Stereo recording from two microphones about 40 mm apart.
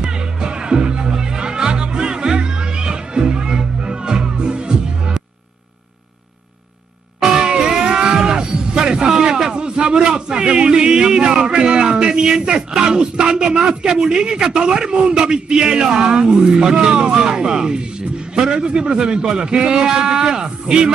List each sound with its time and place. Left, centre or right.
0.0 s music: right
7.2 s music: centre
11.5 s a man's voice: right